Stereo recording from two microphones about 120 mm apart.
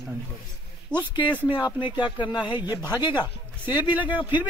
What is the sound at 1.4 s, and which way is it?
Speech, 40° left (ahead or behind).